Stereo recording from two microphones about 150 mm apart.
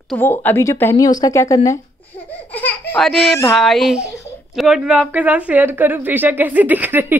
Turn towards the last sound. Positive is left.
turn(degrees=-15)  # may be behind; listen again after turning